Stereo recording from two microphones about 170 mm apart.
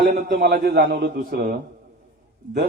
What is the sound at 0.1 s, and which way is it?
A man's voice, 75° right (ahead or behind).